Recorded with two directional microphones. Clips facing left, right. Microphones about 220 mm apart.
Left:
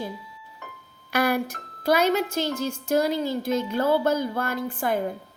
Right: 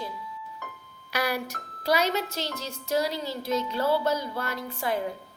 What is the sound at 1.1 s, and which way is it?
A woman's voice, 50° left (ahead or behind).